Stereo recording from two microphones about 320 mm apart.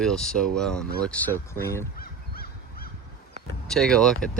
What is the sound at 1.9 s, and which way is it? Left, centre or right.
Goose, left.